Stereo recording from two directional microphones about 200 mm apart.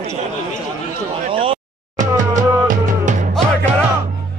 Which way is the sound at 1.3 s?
25° right (ahead or behind).